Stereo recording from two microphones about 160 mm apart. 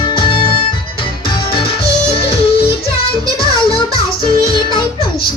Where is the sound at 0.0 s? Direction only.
30° left (ahead or behind).